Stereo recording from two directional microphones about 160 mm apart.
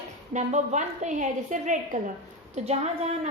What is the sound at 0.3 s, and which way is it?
A woman's voice, 50° right (ahead or behind).